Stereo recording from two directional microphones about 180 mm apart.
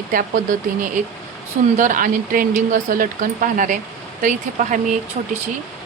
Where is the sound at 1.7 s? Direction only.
45° right (ahead or behind).